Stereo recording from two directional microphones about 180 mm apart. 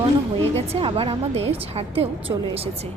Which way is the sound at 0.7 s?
30° right (ahead or behind).